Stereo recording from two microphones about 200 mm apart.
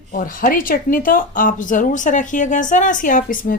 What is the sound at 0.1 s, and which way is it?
Speech, 45° left (ahead or behind).